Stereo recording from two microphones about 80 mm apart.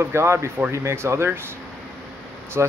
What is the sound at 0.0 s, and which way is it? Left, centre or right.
Speech, right.